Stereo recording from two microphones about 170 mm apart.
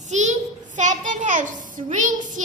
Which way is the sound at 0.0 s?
45° right (ahead or behind).